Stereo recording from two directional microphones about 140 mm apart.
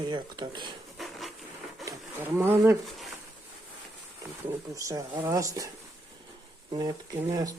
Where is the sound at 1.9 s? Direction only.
15° right (ahead or behind).